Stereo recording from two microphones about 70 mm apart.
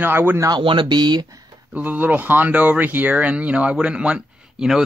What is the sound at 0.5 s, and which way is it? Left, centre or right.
Speech, right.